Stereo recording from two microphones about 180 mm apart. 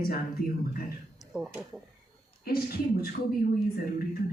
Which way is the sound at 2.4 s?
55° left (ahead or behind).